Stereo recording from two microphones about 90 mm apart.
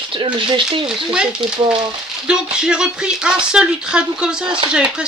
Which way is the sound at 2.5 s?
10° right (ahead or behind).